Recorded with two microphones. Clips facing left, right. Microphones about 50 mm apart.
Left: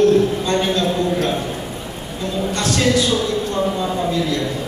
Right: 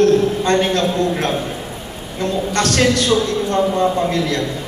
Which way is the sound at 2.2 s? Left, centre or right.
Right.